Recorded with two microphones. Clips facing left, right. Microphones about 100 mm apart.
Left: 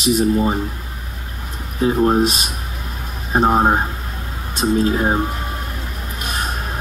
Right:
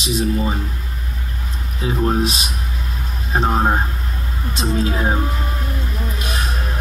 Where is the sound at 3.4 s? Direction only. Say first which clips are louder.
Left 3 dB; 15° left (ahead or behind).